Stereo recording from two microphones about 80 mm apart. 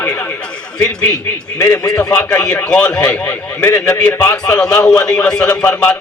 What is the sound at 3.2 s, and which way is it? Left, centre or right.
A man's voice, left.